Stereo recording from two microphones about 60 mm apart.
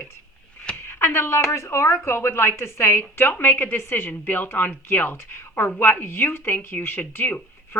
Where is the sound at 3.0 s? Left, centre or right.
Left.